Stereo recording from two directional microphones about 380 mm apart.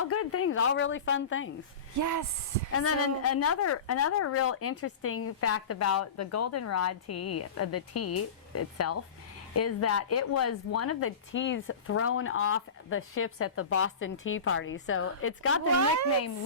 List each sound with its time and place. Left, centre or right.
0.0 s a woman's voice: left
2.0 s speech: right
2.7 s a woman's voice: left